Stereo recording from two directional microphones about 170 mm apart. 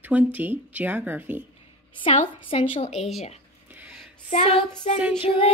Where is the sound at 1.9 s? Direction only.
30° left (ahead or behind).